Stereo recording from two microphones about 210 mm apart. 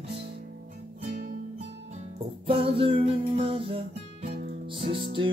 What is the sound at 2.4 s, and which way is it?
Music, 25° right (ahead or behind).